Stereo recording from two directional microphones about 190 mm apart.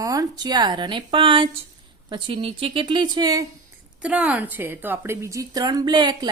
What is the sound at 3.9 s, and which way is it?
A woman's voice, 5° right (ahead or behind).